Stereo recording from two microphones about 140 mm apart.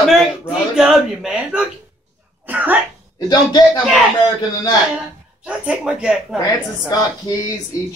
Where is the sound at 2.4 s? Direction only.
10° right (ahead or behind).